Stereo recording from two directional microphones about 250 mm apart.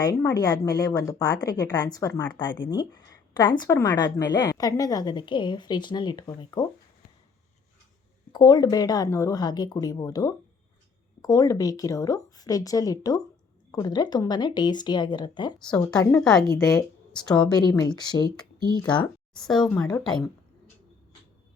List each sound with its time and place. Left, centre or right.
0.0 s speech: centre
8.3 s speech: centre
15.5 s speech: centre
16.0 s speech: centre
16.7 s speech: centre
17.3 s speech: centre
19.5 s speech: centre